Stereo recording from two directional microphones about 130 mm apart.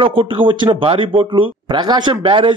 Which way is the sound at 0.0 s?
40° right (ahead or behind).